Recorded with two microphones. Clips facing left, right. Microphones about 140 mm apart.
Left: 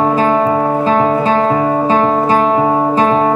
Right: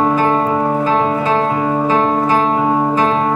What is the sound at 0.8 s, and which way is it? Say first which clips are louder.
Music: left 3 dB; 30° left (ahead or behind).